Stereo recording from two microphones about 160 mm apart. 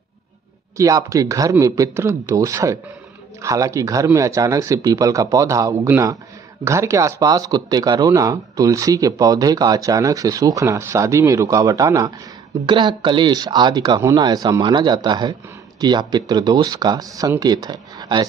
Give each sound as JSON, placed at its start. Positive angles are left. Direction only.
{"t": 0.7, "sound": "speech", "side_deg": -20}